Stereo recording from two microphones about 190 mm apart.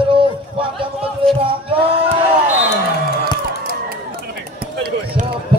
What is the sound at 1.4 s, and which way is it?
Speech, 30° right (ahead or behind).